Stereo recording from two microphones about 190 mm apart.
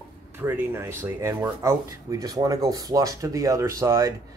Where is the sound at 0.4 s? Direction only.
10° right (ahead or behind).